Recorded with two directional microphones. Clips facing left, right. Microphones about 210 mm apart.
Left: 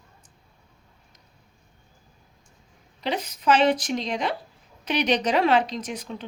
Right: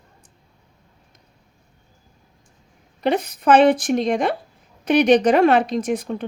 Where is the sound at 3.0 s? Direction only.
55° right (ahead or behind).